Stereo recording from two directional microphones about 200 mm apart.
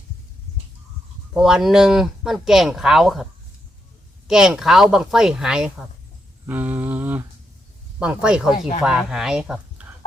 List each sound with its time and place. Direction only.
1.3 s speech: centre (ahead or behind)
4.3 s speech: 5° right (ahead or behind)
6.4 s humming: 10° right (ahead or behind)
7.9 s speech: 5° right (ahead or behind)